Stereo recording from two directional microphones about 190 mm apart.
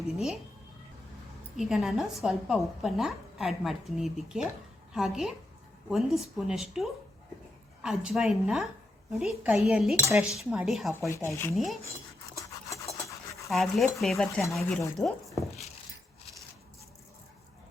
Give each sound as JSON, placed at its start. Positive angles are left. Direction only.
{"t": 1.5, "sound": "speech", "side_deg": 0}
{"t": 11.1, "sound": "speech", "side_deg": 15}
{"t": 11.5, "sound": "speech", "side_deg": 0}
{"t": 12.4, "sound": "dog", "side_deg": 15}
{"t": 13.5, "sound": "speech", "side_deg": 0}